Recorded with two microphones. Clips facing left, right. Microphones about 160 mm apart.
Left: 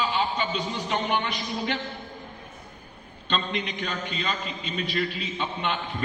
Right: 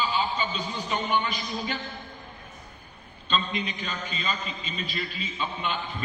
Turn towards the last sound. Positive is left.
turn(degrees=70)  # may be behind; listen again after turning